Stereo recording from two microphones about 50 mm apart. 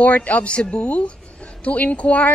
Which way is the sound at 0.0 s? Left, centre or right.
Left.